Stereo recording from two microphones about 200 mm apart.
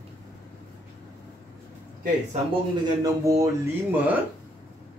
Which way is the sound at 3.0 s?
15° right (ahead or behind).